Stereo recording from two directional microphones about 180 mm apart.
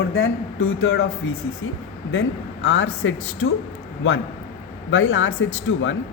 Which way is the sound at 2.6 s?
85° left.